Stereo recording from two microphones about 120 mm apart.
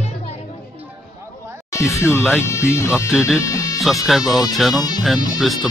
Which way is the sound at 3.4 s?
30° left (ahead or behind).